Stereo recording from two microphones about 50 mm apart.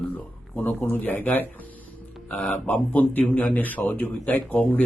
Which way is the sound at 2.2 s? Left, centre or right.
Left.